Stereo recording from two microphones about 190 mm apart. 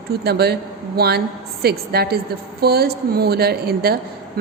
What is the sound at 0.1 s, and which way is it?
A woman's voice, 55° right (ahead or behind).